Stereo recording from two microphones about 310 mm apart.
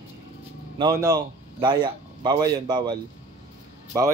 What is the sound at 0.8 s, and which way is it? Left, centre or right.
A man's voice, centre.